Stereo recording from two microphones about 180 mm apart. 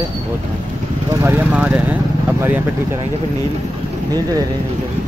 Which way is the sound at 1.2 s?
10° right (ahead or behind).